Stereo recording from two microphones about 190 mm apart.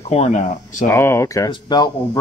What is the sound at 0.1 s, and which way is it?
Speech, 35° left (ahead or behind).